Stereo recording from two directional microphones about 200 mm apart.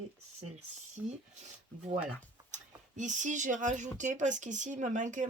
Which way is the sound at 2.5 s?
40° right (ahead or behind).